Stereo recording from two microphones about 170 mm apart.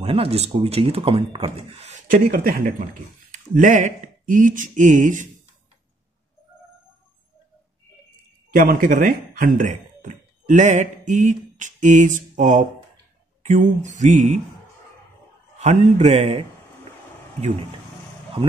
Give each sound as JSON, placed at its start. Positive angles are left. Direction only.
{"t": 0.0, "sound": "speech", "side_deg": -35}
{"t": 2.0, "sound": "speech", "side_deg": -55}
{"t": 8.5, "sound": "speech", "side_deg": -55}
{"t": 15.6, "sound": "speech", "side_deg": -40}